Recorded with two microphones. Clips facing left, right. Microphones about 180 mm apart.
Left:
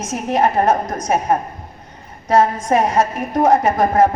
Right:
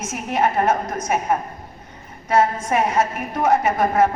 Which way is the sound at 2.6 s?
35° left (ahead or behind).